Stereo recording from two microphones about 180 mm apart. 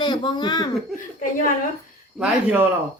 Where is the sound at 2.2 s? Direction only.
10° right (ahead or behind).